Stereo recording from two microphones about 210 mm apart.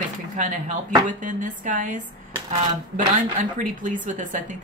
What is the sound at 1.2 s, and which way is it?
Speech, 40° right (ahead or behind).